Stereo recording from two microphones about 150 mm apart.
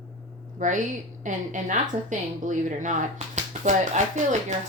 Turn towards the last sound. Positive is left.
turn(degrees=-55)  # may be behind; listen again after turning